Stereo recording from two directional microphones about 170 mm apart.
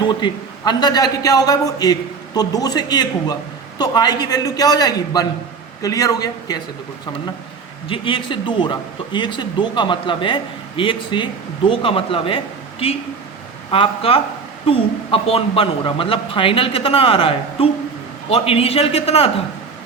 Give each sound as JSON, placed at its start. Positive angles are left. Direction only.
{"t": 0.0, "sound": "a man's voice", "side_deg": 25}
{"t": 7.9, "sound": "a man's voice", "side_deg": 30}
{"t": 13.7, "sound": "a woman's voice", "side_deg": 30}